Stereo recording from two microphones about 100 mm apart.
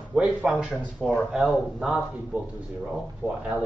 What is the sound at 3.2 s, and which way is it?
Speech, 20° right (ahead or behind).